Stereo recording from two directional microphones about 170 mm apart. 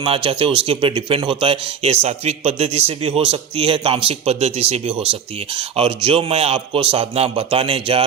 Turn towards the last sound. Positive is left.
turn(degrees=-35)  # may be behind; listen again after turning